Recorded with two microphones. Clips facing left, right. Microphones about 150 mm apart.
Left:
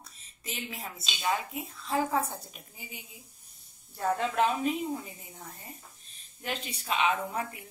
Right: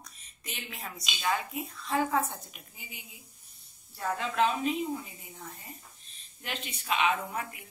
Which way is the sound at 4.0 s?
45° left (ahead or behind).